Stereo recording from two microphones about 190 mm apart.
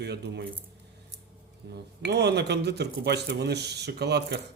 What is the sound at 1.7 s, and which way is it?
Speech, 60° right (ahead or behind).